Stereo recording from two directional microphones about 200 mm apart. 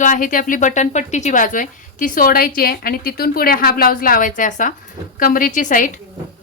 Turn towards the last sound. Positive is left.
turn(degrees=40)  # may be behind; listen again after turning